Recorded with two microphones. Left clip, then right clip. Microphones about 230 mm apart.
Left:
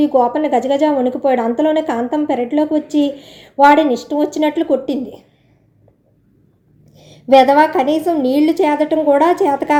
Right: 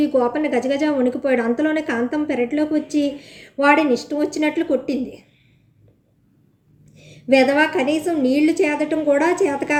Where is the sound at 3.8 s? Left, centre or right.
Left.